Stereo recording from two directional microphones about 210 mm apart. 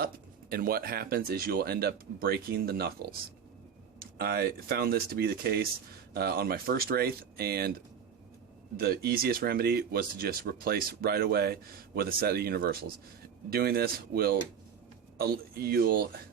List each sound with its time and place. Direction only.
0.5 s speech: 45° right (ahead or behind)
8.7 s speech: 45° right (ahead or behind)